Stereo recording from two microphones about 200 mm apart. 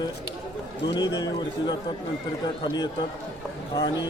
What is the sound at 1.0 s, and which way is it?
Speech, 20° left (ahead or behind).